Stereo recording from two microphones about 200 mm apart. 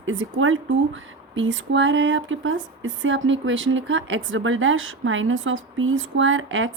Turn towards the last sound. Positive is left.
turn(degrees=-75)  # may be behind; listen again after turning